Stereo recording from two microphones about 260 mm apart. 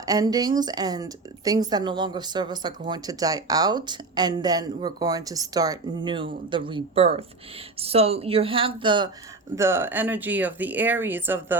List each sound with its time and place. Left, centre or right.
0.0 s a woman's voice: centre